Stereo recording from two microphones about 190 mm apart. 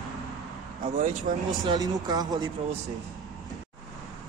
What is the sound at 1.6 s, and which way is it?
Speech, 20° right (ahead or behind).